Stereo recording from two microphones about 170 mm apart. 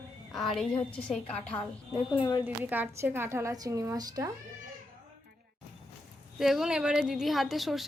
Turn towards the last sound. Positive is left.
turn(degrees=0)  # may be behind; listen again after turning